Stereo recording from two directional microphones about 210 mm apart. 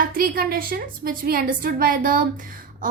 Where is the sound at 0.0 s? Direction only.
45° right (ahead or behind).